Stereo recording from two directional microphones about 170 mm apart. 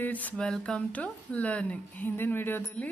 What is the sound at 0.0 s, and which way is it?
A woman's voice, 10° left (ahead or behind).